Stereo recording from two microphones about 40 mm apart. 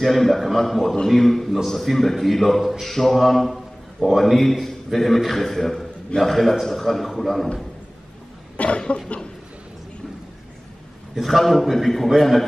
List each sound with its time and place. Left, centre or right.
0.0 s a man's voice: centre
8.5 s cough: left
11.1 s a man's voice: centre